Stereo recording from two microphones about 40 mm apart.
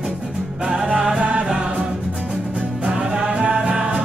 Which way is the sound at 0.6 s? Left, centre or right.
Centre.